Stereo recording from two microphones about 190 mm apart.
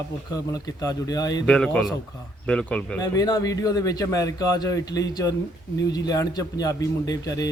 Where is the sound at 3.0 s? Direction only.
20° left (ahead or behind).